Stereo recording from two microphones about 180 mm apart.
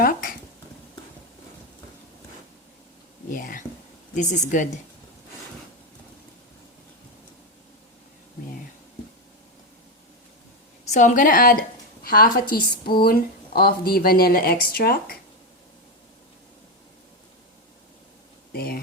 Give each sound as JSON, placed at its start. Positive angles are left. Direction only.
{"t": 3.2, "sound": "a woman's voice", "side_deg": 50}
{"t": 10.8, "sound": "a woman's voice", "side_deg": 40}
{"t": 18.5, "sound": "a sound", "side_deg": 60}